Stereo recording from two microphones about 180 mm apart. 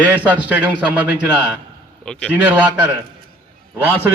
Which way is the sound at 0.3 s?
10° right (ahead or behind).